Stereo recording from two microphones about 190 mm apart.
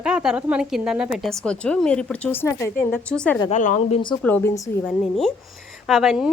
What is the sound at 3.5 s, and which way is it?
Speech, 40° left (ahead or behind).